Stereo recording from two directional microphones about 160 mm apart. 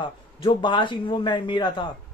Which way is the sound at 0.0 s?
30° left (ahead or behind).